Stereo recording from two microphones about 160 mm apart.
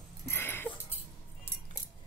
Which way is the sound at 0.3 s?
15° left (ahead or behind).